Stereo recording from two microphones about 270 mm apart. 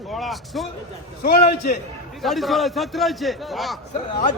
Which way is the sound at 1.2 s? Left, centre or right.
Left.